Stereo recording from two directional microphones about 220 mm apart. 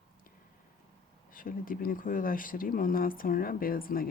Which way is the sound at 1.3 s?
40° left (ahead or behind).